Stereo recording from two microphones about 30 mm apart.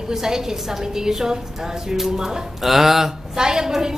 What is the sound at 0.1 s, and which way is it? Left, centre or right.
A woman's voice, centre.